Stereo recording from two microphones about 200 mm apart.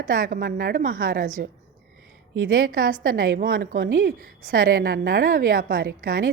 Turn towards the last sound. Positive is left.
turn(degrees=-45)  # may be behind; listen again after turning